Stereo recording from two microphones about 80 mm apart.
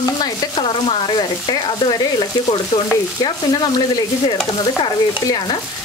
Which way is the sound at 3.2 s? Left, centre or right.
Left.